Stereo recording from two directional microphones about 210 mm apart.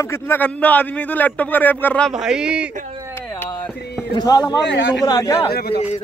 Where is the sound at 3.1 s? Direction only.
10° left (ahead or behind).